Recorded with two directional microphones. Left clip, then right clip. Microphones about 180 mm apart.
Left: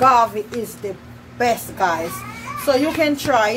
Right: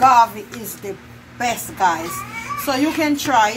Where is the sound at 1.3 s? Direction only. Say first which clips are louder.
Left 2 dB; 40° left (ahead or behind).